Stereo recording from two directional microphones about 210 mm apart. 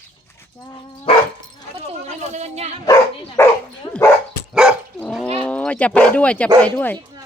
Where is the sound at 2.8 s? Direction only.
15° left (ahead or behind).